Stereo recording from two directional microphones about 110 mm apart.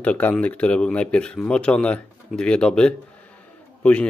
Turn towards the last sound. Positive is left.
turn(degrees=10)  # may be behind; listen again after turning